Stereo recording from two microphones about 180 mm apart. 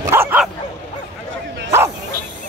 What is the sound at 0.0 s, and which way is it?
Bow-wow, 15° right (ahead or behind).